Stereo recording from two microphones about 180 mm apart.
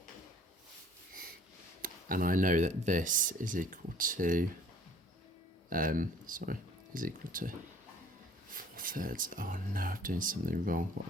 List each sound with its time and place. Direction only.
1.8 s speech: 50° right (ahead or behind)
5.6 s speech: 50° right (ahead or behind)
8.5 s speech: 50° right (ahead or behind)